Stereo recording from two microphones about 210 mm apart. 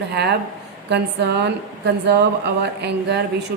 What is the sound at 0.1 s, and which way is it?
A woman's voice, 50° right (ahead or behind).